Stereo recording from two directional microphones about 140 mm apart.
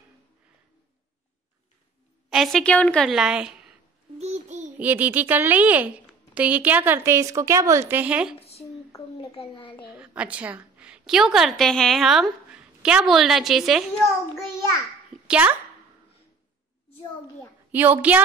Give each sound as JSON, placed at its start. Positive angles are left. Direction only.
{"t": 2.2, "sound": "a woman's voice", "side_deg": 0}
{"t": 4.2, "sound": "a sound", "side_deg": -55}
{"t": 4.7, "sound": "a woman's voice", "side_deg": -10}
{"t": 9.2, "sound": "a child's voice", "side_deg": 40}
{"t": 9.8, "sound": "a woman's voice", "side_deg": -10}
{"t": 15.2, "sound": "a child's voice", "side_deg": -10}
{"t": 17.6, "sound": "a woman's voice", "side_deg": -10}